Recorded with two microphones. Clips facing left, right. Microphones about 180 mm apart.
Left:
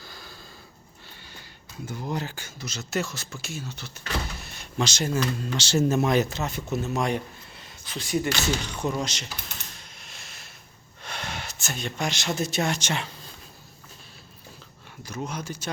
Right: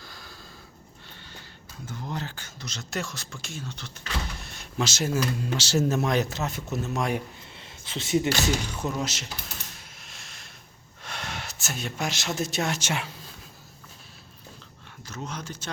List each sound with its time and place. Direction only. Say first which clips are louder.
0.0 s snort: left 1 dB; centre (ahead or behind)
1.9 s speech: left 3 dB; 10° left (ahead or behind)
7.5 s a sound: right 1 dB; 25° right (ahead or behind)
8.6 s speech: left 1 dB; 5° right (ahead or behind)
9.7 s a sound: left 1 dB; centre (ahead or behind)
11.0 s speech: left 1 dB; centre (ahead or behind)
15.0 s speech: left 3 dB; 10° left (ahead or behind)